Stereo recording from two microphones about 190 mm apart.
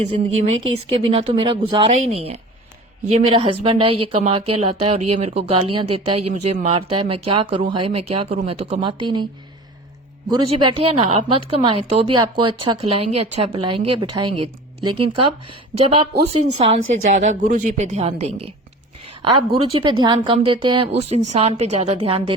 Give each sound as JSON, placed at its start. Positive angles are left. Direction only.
{"t": 0.0, "sound": "a woman's voice", "side_deg": -35}
{"t": 10.2, "sound": "speech", "side_deg": -25}
{"t": 16.9, "sound": "a woman's voice", "side_deg": -40}